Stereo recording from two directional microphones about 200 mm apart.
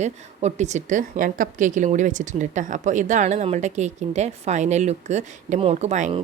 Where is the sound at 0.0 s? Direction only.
35° right (ahead or behind).